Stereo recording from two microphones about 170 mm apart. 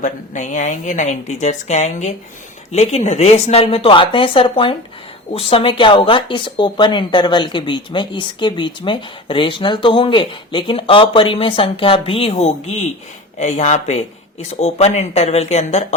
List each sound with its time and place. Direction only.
0.0 s speech: 45° left (ahead or behind)